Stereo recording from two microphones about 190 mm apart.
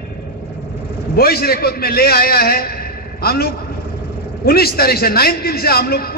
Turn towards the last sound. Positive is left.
turn(degrees=55)  # may be behind; listen again after turning